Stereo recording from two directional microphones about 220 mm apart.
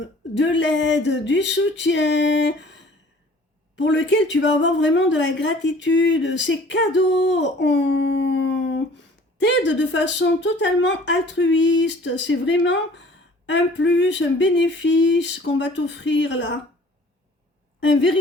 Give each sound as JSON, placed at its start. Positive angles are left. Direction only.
{"t": 0.0, "sound": "speech", "side_deg": 55}